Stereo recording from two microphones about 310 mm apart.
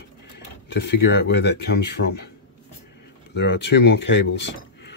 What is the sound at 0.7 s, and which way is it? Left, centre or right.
Speech, left.